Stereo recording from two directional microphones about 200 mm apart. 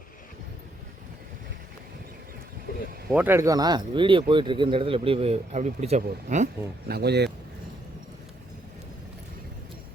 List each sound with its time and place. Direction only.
3.1 s speech: 10° right (ahead or behind); by 6.5 s 35° right (ahead or behind)
6.8 s speech: 55° right (ahead or behind)